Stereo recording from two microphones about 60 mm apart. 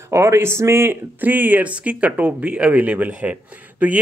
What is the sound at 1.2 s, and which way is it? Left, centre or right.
Speech, right.